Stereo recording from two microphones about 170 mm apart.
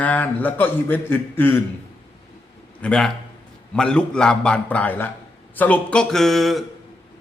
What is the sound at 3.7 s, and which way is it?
Music, 5° left (ahead or behind).